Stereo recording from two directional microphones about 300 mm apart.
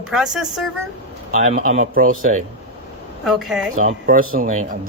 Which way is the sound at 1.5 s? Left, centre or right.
Right.